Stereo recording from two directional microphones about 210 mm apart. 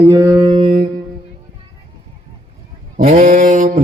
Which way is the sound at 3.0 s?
35° right (ahead or behind).